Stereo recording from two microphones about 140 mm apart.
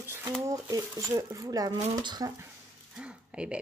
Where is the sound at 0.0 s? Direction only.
15° right (ahead or behind).